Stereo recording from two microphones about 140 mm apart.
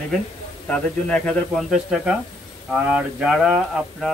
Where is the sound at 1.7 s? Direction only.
5° right (ahead or behind).